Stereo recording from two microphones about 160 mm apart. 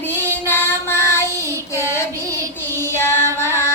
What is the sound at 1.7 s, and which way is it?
Child singing, 15° left (ahead or behind).